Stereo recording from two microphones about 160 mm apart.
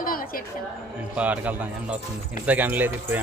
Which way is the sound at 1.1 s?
10° right (ahead or behind).